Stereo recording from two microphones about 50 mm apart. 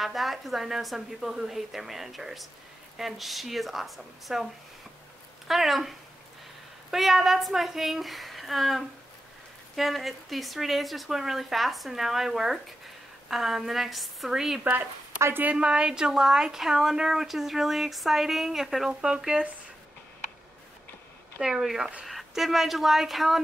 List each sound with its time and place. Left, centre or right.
0.0 s speech: centre
5.5 s speech: centre
15.5 s a woman's voice: centre
18.9 s a woman's voice: centre
21.4 s a woman's voice: centre